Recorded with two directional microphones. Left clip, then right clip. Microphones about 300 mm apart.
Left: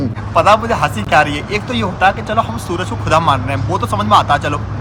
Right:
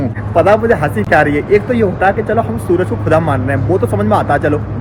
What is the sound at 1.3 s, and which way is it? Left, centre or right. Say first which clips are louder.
Speech: right 7 dB; centre.